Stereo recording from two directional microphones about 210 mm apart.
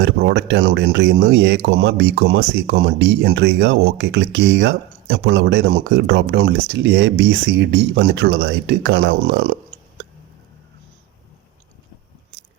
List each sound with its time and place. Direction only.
0.0 s speech: 55° right (ahead or behind)